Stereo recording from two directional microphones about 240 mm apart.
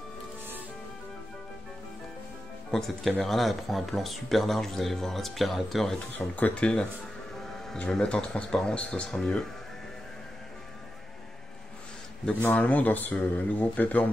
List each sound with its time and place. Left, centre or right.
2.7 s speech: centre
12.3 s speech: centre